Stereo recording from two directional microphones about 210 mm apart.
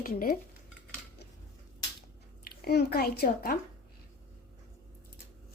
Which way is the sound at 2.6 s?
50° left (ahead or behind).